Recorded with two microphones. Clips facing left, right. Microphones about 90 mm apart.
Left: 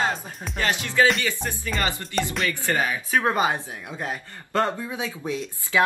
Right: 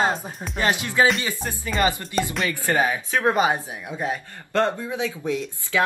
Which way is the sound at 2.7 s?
20° right (ahead or behind).